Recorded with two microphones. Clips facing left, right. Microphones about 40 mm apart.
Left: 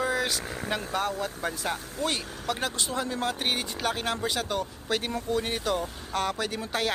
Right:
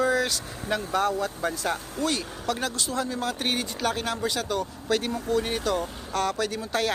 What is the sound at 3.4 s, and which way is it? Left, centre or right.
Speech, centre.